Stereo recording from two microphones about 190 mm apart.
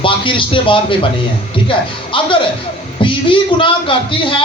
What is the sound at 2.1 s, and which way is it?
A man's voice, 25° left (ahead or behind).